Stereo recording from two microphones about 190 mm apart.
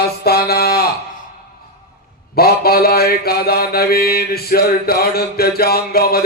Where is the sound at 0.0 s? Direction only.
55° left (ahead or behind).